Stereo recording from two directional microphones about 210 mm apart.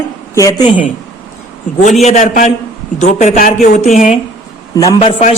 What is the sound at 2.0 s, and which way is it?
A man's voice, 35° left (ahead or behind).